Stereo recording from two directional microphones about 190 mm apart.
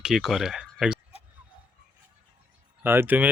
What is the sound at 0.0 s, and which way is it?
Speech, centre (ahead or behind).